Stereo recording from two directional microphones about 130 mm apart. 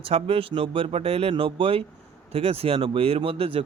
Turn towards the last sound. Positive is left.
turn(degrees=-45)  # may be behind; listen again after turning